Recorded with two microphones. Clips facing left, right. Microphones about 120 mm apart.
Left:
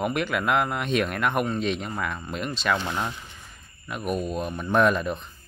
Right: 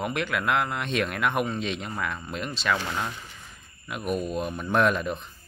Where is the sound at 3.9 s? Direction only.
Centre (ahead or behind).